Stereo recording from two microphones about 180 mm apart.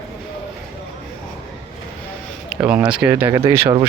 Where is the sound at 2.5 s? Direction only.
5° right (ahead or behind).